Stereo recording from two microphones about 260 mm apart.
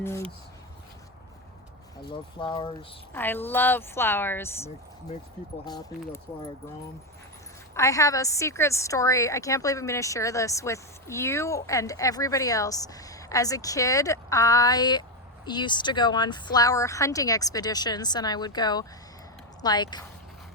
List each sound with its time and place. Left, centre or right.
2.0 s speech: centre
3.1 s a woman's voice: centre
7.8 s a woman's voice: centre